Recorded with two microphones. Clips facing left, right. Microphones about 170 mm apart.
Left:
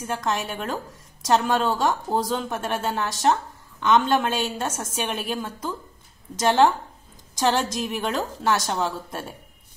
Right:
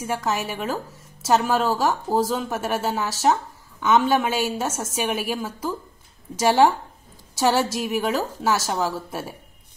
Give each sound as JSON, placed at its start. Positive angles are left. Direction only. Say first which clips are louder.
{"t": 0.0, "sound": "a woman's voice", "louder": "right 1 dB", "side_deg": -10}